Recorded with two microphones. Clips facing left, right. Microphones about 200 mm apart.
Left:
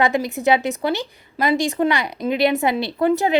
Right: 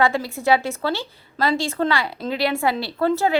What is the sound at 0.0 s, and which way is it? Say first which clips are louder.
A woman's voice: left 2 dB; 20° left (ahead or behind).